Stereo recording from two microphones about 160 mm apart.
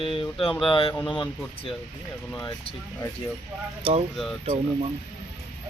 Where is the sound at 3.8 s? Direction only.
35° right (ahead or behind).